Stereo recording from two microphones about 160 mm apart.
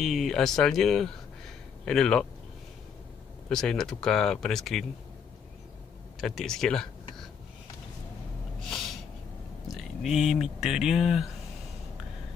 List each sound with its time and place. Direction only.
0.0 s speech: centre (ahead or behind)
3.4 s speech: 5° left (ahead or behind)
6.2 s speech: centre (ahead or behind)
9.7 s speech: centre (ahead or behind)